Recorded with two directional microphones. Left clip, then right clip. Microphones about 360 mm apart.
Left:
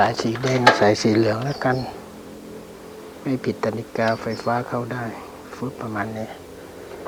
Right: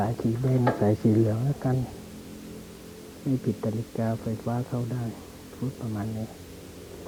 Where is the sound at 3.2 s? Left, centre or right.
Centre.